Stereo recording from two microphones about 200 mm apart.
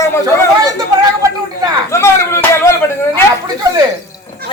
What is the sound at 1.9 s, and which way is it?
Speech, 15° left (ahead or behind).